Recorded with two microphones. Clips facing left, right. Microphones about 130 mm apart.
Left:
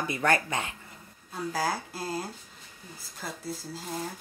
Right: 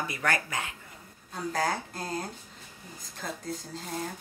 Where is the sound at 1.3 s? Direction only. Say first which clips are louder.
Even; 5° left (ahead or behind).